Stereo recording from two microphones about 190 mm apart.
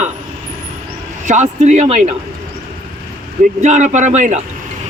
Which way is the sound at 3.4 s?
40° right (ahead or behind).